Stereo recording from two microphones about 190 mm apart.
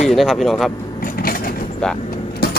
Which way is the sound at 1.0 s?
50° left (ahead or behind).